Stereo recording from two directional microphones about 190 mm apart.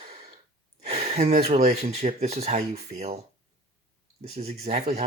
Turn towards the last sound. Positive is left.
turn(degrees=-35)  # may be behind; listen again after turning